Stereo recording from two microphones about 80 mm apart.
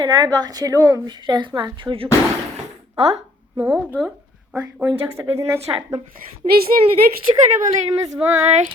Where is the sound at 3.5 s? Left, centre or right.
Right.